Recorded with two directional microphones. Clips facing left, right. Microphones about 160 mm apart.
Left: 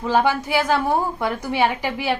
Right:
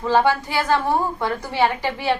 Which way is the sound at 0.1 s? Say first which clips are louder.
Right 1 dB; 15° left (ahead or behind).